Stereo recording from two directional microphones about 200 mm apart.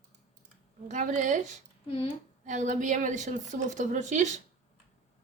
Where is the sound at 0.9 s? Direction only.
40° right (ahead or behind).